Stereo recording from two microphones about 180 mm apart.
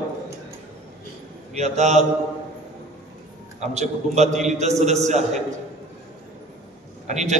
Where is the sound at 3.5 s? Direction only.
40° right (ahead or behind).